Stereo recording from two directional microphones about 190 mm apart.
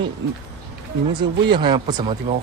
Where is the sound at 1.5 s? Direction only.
25° right (ahead or behind).